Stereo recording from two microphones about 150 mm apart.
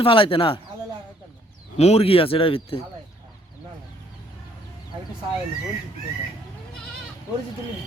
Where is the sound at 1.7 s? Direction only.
45° left (ahead or behind).